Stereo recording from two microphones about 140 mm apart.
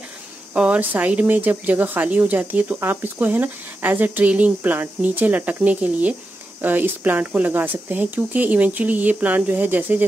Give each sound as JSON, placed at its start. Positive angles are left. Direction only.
{"t": 0.6, "sound": "speech", "side_deg": -10}